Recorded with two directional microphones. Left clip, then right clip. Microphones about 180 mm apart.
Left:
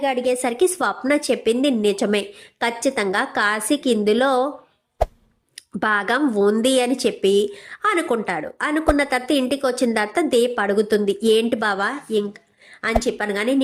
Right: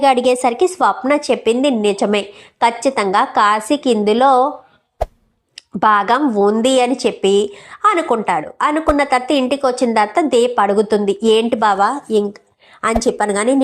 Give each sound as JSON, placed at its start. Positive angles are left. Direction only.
{"t": 0.0, "sound": "a woman's voice", "side_deg": -5}
{"t": 0.3, "sound": "a woman's voice", "side_deg": 10}
{"t": 5.0, "sound": "a sound", "side_deg": 0}
{"t": 5.5, "sound": "a woman's voice", "side_deg": 10}
{"t": 13.0, "sound": "speech", "side_deg": -20}